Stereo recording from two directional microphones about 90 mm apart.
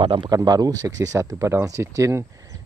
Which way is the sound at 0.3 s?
45° right (ahead or behind).